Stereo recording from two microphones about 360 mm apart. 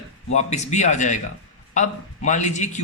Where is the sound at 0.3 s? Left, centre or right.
Centre.